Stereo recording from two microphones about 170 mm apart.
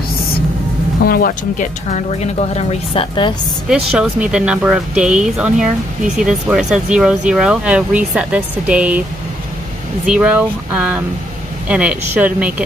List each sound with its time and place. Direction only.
1.0 s speech: 60° left (ahead or behind); by 3.3 s 30° left (ahead or behind)
3.6 s speech: 5° right (ahead or behind)
10.0 s speech: 5° right (ahead or behind)